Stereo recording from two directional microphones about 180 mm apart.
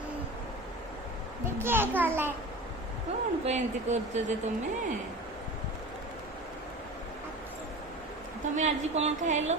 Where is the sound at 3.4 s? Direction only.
40° right (ahead or behind).